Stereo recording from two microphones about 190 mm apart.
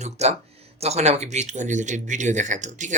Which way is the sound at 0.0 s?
35° right (ahead or behind).